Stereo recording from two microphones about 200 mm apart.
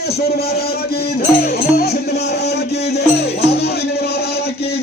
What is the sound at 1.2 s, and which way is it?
Music, 50° left (ahead or behind).